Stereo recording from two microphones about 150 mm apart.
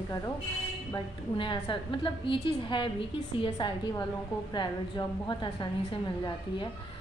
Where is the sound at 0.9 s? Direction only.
35° left (ahead or behind).